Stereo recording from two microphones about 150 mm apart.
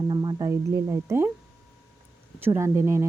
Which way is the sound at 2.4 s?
15° right (ahead or behind).